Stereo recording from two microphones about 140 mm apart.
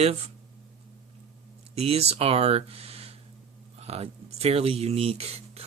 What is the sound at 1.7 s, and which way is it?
Speech, 50° right (ahead or behind).